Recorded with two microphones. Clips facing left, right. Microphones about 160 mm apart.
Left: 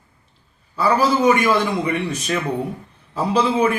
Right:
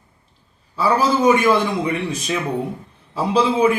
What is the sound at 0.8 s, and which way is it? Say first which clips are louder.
A man's voice: even; centre (ahead or behind).